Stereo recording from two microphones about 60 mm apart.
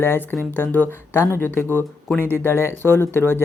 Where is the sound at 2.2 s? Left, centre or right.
Left.